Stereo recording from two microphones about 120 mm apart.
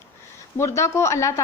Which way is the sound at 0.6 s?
25° left (ahead or behind).